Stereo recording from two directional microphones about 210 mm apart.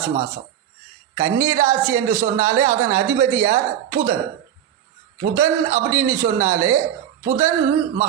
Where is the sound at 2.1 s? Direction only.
45° right (ahead or behind).